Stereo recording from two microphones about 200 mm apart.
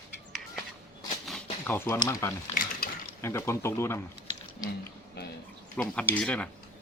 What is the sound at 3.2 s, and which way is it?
Speech, 15° left (ahead or behind).